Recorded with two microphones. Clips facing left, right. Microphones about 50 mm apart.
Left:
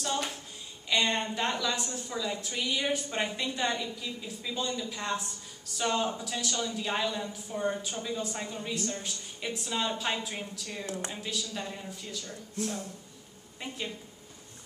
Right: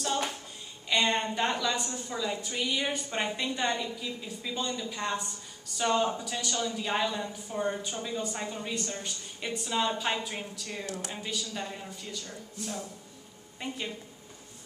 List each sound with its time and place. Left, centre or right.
0.8 s speech: centre
13.6 s speech: centre